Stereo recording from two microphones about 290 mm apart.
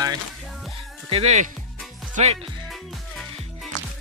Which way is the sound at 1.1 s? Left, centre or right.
Right.